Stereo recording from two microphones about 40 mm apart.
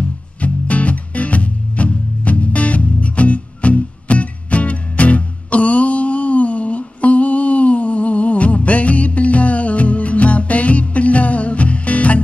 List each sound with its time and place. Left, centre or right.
0.4 s music: left